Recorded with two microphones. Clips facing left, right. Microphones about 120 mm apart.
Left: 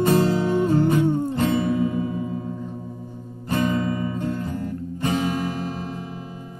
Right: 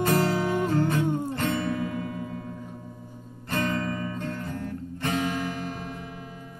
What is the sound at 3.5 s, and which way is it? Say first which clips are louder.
Music: left 5 dB; 15° left (ahead or behind).